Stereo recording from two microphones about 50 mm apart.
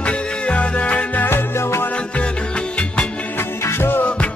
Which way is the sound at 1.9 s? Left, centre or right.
Left.